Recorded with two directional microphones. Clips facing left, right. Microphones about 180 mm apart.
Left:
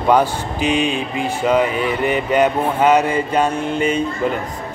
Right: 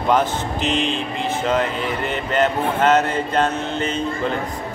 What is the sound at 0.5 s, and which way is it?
Speech, 15° left (ahead or behind).